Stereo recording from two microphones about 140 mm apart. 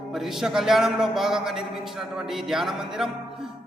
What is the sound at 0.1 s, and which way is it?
A man's voice, centre (ahead or behind).